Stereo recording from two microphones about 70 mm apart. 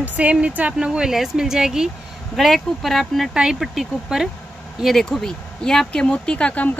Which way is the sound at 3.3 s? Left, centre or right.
Centre.